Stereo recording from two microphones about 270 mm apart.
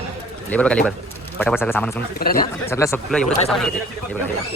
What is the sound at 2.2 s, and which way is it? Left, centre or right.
Speech, left.